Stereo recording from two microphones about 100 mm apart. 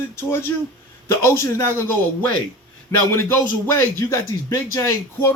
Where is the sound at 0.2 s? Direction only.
25° left (ahead or behind).